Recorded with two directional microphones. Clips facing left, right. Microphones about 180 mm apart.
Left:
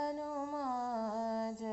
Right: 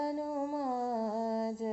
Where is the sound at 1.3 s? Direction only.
5° right (ahead or behind).